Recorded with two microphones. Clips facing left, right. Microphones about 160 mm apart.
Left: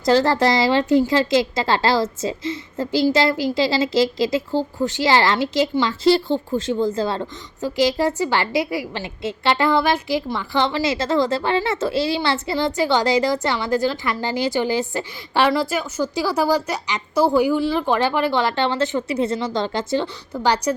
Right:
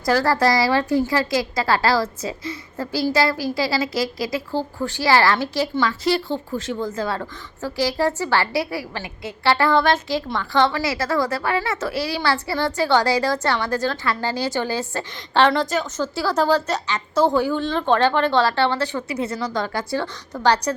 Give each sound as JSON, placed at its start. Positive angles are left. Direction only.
{"t": 0.0, "sound": "a woman's voice", "side_deg": 20}
{"t": 20.3, "sound": "a woman's voice", "side_deg": 10}